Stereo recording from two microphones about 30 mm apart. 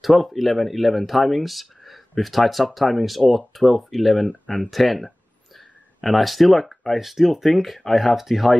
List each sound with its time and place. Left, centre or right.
0.0 s speech: centre
7.0 s speech: centre